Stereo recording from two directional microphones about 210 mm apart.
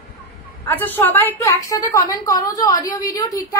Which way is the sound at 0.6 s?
10° left (ahead or behind).